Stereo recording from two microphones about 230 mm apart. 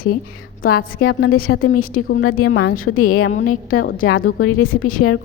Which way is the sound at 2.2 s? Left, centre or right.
Left.